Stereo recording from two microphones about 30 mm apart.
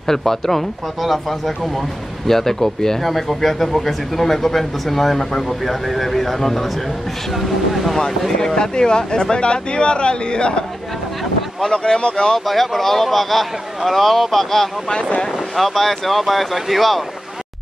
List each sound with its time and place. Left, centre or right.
0.0 s speech: centre
2.2 s speech: centre
3.0 s speech: centre
8.4 s speech: left
11.6 s speech: left
12.4 s speech: centre
14.9 s speech: left
15.5 s speech: centre